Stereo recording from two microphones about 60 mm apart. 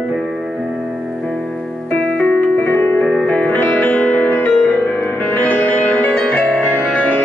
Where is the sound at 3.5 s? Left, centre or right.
Left.